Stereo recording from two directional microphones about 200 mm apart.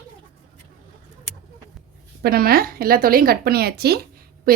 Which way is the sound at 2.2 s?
50° right (ahead or behind).